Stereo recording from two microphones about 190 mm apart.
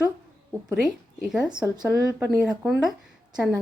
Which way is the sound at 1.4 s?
20° right (ahead or behind).